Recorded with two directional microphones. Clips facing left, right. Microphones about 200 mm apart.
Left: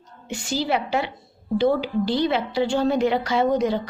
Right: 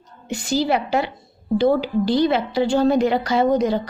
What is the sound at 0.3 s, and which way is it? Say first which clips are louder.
A woman's voice: right 4 dB; 40° right (ahead or behind).